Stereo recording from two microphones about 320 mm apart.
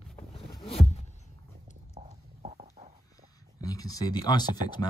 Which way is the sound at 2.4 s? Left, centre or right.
Right.